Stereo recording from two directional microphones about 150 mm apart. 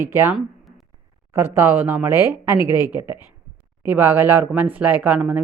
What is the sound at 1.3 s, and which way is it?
Speech, 15° right (ahead or behind).